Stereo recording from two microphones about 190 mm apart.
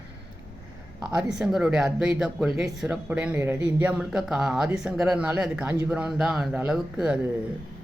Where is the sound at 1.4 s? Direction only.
Centre (ahead or behind).